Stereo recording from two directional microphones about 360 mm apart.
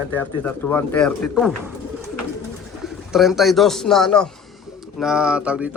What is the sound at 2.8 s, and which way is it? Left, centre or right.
Speech, centre.